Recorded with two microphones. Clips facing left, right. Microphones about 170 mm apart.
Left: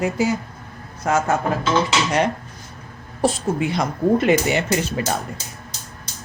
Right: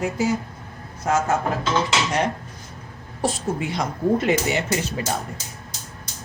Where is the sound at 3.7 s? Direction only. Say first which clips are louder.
Left 2 dB; 65° left (ahead or behind).